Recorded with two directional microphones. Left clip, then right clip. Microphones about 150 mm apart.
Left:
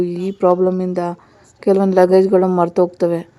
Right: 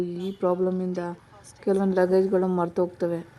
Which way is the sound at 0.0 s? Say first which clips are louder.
Left 11 dB; 20° left (ahead or behind).